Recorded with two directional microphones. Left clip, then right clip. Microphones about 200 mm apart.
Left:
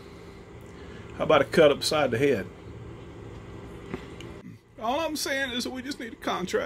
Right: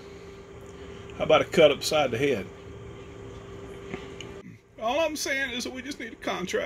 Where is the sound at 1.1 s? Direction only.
5° left (ahead or behind).